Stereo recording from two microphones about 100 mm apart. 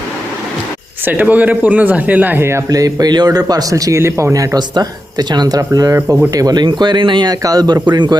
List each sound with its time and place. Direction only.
1.0 s a man's voice: 20° right (ahead or behind); by 8.2 s 45° right (ahead or behind)